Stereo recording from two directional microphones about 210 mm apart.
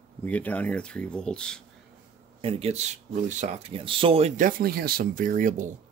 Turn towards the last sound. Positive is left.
turn(degrees=-35)  # may be behind; listen again after turning